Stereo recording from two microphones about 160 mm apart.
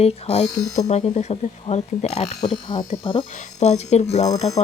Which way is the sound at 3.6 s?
45° left (ahead or behind).